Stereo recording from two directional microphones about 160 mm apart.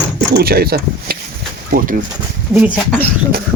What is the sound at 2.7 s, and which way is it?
Speech, 10° left (ahead or behind).